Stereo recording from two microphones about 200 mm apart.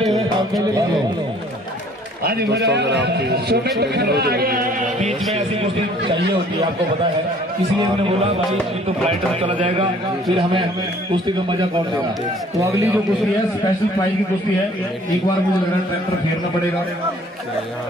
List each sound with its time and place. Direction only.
2.2 s a man's voice: 55° right (ahead or behind)
5.3 s a man's voice: 30° right (ahead or behind)
9.6 s a man's voice: 35° right (ahead or behind)
11.2 s a man's voice: 20° right (ahead or behind)